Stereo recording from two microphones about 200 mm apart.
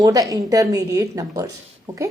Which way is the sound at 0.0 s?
15° right (ahead or behind).